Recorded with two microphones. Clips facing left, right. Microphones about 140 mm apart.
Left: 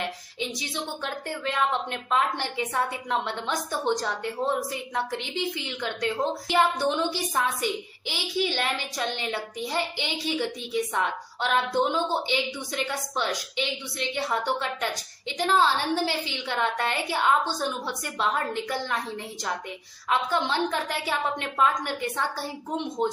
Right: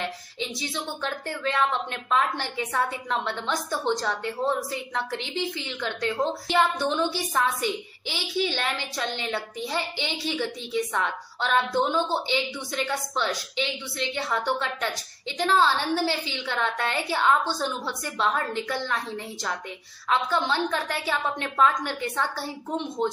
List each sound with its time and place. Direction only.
0.0 s a woman's voice: 15° left (ahead or behind)
4.9 s a woman's voice: 15° left (ahead or behind)
20.1 s a woman's voice: 15° left (ahead or behind)